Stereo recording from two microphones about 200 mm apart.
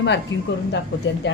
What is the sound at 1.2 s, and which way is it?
Speech, 60° left (ahead or behind).